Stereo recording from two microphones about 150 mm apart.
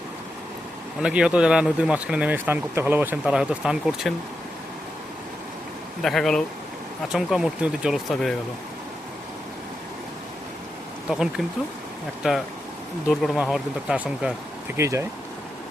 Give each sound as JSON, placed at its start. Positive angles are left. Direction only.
{"t": 1.0, "sound": "speech", "side_deg": -5}
{"t": 6.0, "sound": "speech", "side_deg": 0}
{"t": 12.2, "sound": "speech", "side_deg": -5}
{"t": 14.8, "sound": "speech", "side_deg": -20}